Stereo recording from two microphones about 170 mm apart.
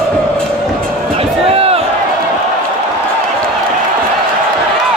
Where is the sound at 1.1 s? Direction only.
35° right (ahead or behind).